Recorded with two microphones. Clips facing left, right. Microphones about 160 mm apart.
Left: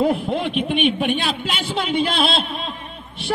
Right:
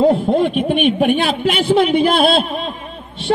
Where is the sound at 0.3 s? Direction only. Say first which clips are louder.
Right 7 dB; 45° right (ahead or behind).